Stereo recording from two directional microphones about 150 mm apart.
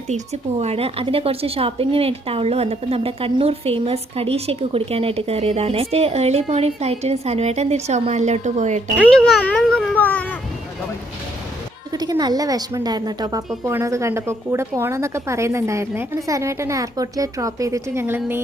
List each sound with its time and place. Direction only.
0.6 s a woman's voice: 40° right (ahead or behind)
9.0 s a child's voice: 5° left (ahead or behind)
11.9 s a woman's voice: 25° right (ahead or behind)